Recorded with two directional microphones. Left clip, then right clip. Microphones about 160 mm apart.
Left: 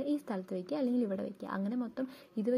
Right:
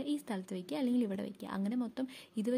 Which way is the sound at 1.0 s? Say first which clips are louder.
Left 2 dB; 65° right (ahead or behind).